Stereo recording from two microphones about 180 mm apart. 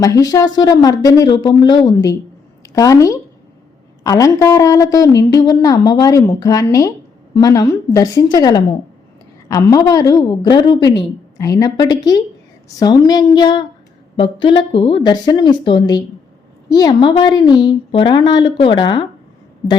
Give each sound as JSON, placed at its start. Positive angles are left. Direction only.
{"t": 0.0, "sound": "a woman's voice", "side_deg": 20}